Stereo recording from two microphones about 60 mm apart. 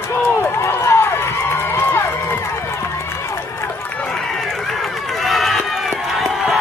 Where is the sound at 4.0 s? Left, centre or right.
Centre.